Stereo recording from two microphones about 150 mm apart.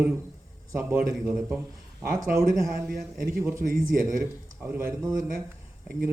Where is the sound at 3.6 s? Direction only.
65° right (ahead or behind).